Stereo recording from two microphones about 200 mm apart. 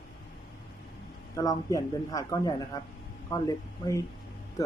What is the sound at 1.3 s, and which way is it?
Speech, 20° left (ahead or behind).